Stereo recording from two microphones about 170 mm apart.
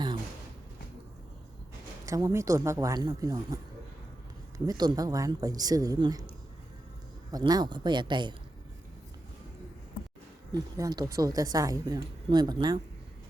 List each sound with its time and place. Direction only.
2.0 s a woman's voice: 15° right (ahead or behind)
7.3 s a woman's voice: 20° right (ahead or behind)
10.5 s a woman's voice: 20° right (ahead or behind)